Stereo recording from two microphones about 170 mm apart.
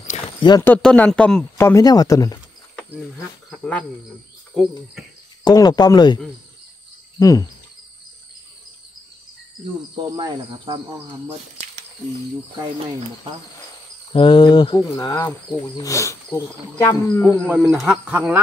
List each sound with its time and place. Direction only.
0.4 s speech: 25° left (ahead or behind)
0.7 s speech: 5° left (ahead or behind)
3.4 s speech: 5° left (ahead or behind)
5.4 s speech: 25° left (ahead or behind)
7.2 s speech: 20° left (ahead or behind)
9.9 s speech: 25° right (ahead or behind)
14.1 s speech: 30° left (ahead or behind)
17.7 s speech: 5° right (ahead or behind)